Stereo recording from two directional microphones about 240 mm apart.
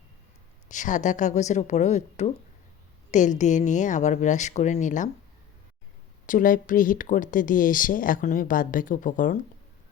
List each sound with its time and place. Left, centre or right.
0.7 s speech: left
6.2 s speech: left